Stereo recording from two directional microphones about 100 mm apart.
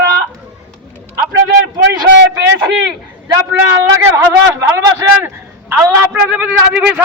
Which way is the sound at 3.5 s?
25° right (ahead or behind).